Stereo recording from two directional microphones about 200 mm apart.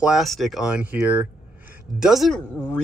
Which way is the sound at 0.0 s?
Centre (ahead or behind).